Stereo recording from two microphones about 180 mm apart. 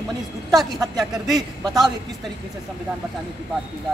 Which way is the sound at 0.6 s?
Centre (ahead or behind).